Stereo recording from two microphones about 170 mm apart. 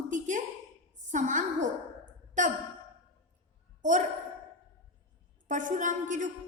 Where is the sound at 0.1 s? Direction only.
50° right (ahead or behind).